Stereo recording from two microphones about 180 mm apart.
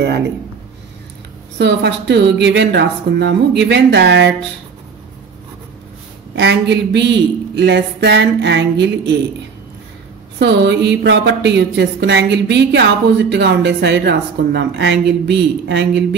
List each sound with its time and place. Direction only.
0.0 s a sound: 70° right (ahead or behind)
1.6 s speech: 75° right (ahead or behind)
6.3 s speech: 70° right (ahead or behind); by 9.1 s 90° right
10.4 s speech: 75° right (ahead or behind)